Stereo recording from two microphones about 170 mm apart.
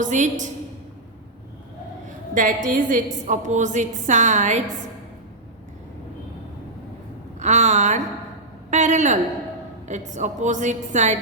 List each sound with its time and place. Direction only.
0.0 s a woman's voice: 45° right (ahead or behind)
2.3 s a woman's voice: 50° right (ahead or behind)
7.3 s a woman's voice: 45° right (ahead or behind)
8.7 s a sound: 45° right (ahead or behind)
9.9 s a woman's voice: 45° right (ahead or behind)